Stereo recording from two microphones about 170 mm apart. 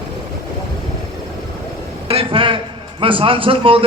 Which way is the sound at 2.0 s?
35° right (ahead or behind).